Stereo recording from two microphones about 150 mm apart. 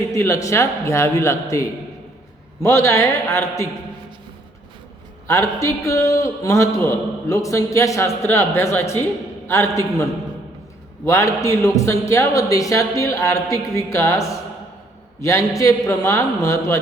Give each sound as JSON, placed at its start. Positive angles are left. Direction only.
{"t": 0.1, "sound": "a man's voice", "side_deg": 20}
{"t": 5.3, "sound": "a man's voice", "side_deg": 20}